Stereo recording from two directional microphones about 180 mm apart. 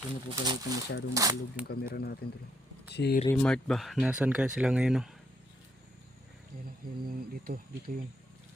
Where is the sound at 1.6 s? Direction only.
55° left (ahead or behind).